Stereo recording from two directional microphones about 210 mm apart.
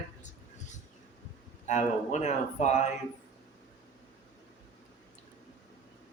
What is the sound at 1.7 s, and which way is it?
Speech, 35° left (ahead or behind).